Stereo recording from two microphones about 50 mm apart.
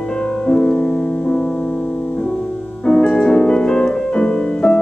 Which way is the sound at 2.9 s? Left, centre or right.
Centre.